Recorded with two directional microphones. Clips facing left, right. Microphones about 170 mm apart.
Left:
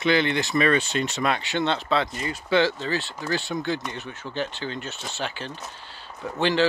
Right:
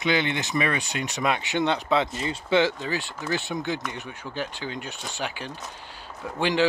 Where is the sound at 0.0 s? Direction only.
15° right (ahead or behind).